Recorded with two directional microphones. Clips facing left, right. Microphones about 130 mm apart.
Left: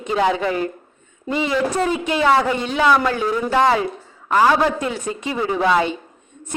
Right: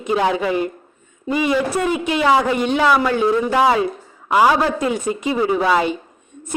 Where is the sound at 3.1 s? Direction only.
20° right (ahead or behind).